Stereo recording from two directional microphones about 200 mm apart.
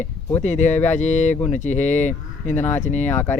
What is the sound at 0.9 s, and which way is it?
Speech, 35° left (ahead or behind).